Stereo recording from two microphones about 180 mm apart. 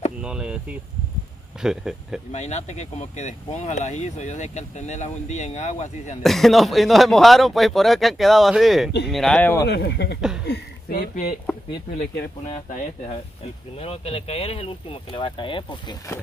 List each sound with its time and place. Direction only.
0.2 s a sound: 5° right (ahead or behind)
1.6 s speech: 5° right (ahead or behind)
2.3 s speech: 40° left (ahead or behind)
6.2 s speech: centre (ahead or behind)
9.7 s speech: 70° left (ahead or behind)
12.4 s speech: 40° left (ahead or behind); by 16.2 s 25° left (ahead or behind)